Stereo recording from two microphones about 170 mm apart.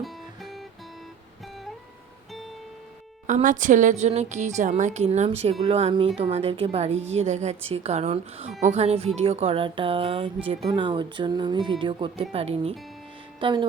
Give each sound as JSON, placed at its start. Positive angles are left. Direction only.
{"t": 0.0, "sound": "music", "side_deg": 0}
{"t": 3.2, "sound": "a woman's voice", "side_deg": -50}